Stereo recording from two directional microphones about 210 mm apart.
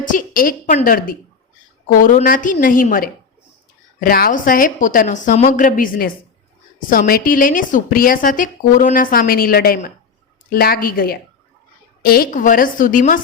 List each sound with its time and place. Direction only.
0.0 s a woman's voice: 40° left (ahead or behind)